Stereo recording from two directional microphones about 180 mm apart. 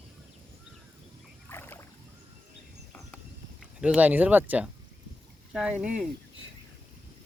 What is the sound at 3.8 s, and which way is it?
Speech, 5° right (ahead or behind).